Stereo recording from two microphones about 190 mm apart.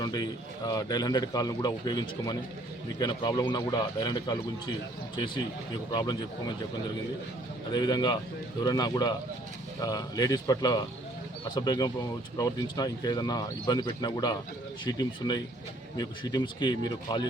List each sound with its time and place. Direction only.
0.0 s a man's voice: 20° left (ahead or behind)
7.7 s a man's voice: 20° left (ahead or behind)